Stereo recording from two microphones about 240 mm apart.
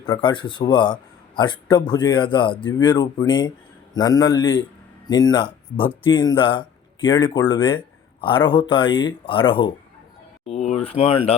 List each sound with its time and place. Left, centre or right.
0.0 s speech: centre
10.4 s a sound: left
11.0 s speech: left